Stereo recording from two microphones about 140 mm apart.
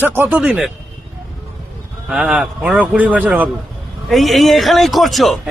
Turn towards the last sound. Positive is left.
turn(degrees=0)  # may be behind; listen again after turning